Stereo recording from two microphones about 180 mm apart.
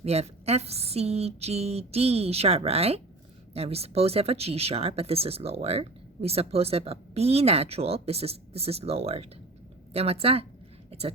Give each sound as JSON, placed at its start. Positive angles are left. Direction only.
{"t": 0.0, "sound": "speech", "side_deg": -35}